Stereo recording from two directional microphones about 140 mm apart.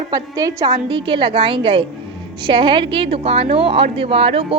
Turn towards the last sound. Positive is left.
turn(degrees=-45)  # may be behind; listen again after turning